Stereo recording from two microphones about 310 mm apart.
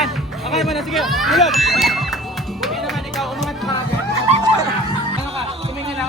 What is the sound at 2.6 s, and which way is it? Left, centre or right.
Music, centre.